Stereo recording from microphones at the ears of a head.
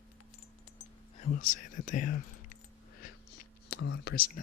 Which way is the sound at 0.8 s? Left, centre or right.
Left.